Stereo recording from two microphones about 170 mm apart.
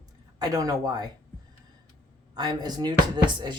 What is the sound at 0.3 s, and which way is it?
Speech, 20° right (ahead or behind).